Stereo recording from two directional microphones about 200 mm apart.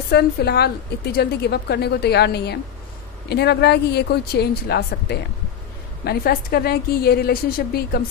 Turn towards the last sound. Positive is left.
turn(degrees=50)  # may be behind; listen again after turning